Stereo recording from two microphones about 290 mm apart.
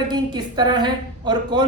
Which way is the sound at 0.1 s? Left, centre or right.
Centre.